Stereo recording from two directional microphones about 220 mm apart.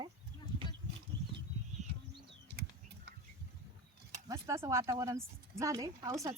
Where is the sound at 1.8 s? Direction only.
30° right (ahead or behind).